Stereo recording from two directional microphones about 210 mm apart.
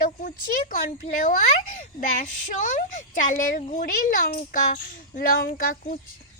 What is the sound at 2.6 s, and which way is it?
A woman's voice, 40° left (ahead or behind).